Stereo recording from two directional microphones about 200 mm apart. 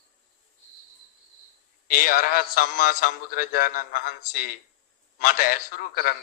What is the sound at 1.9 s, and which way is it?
A man's voice, 45° left (ahead or behind).